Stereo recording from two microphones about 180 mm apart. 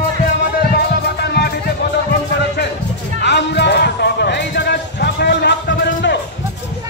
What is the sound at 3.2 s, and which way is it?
Music, 70° left (ahead or behind).